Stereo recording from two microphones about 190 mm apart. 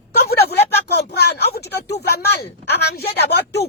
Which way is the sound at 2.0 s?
55° left (ahead or behind).